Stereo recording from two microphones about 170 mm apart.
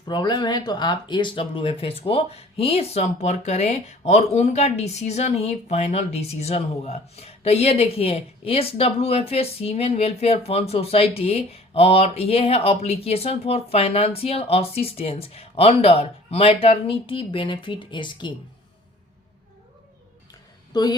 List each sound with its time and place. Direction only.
0.1 s speech: 25° left (ahead or behind)
20.7 s a woman's voice: 25° left (ahead or behind)